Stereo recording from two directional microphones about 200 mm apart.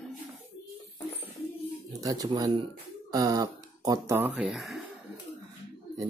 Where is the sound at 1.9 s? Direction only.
20° right (ahead or behind); by 4.8 s centre (ahead or behind).